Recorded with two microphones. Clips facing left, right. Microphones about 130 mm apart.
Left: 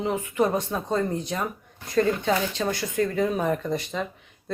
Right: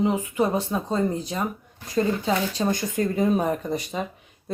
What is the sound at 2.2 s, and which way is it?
Speech, 30° right (ahead or behind).